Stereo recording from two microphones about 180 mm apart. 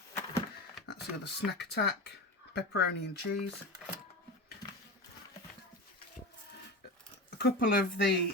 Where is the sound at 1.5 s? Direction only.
65° left (ahead or behind).